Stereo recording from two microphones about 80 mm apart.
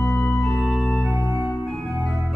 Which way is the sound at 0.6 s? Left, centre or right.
Centre.